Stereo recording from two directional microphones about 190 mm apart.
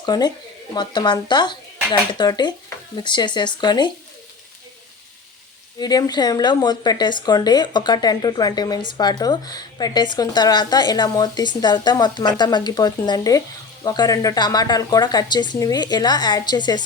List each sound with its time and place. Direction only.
0.0 s speech: 20° left (ahead or behind)
5.8 s speech: 20° left (ahead or behind)